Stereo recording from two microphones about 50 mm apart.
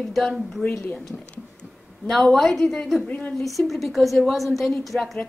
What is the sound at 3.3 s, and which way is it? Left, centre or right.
A woman's voice, centre.